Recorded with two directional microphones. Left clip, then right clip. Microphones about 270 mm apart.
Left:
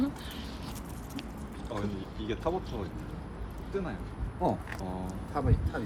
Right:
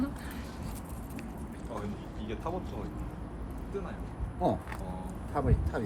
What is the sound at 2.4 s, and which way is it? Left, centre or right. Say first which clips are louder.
Speech: left 5 dB; left.